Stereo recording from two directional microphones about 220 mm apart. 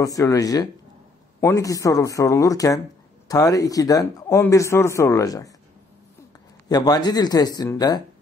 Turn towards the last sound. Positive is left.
turn(degrees=15)  # may be behind; listen again after turning